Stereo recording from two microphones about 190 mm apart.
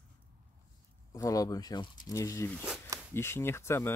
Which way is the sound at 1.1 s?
20° left (ahead or behind).